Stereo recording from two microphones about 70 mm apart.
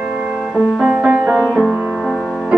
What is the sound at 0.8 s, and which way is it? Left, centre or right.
Music, right.